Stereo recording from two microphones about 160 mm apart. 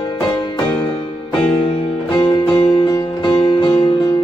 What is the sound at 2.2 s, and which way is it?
Music, 35° left (ahead or behind).